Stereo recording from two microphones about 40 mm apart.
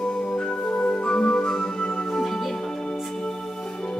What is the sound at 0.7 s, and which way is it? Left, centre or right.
Music, left.